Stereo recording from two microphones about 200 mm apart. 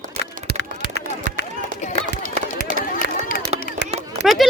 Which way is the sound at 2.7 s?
40° left (ahead or behind).